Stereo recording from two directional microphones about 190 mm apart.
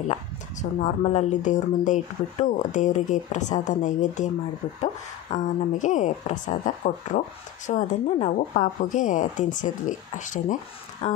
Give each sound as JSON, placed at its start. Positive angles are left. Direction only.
{"t": 0.1, "sound": "speech", "side_deg": 35}
{"t": 5.3, "sound": "speech", "side_deg": 40}